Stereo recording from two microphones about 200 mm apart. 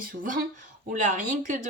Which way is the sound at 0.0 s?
45° right (ahead or behind).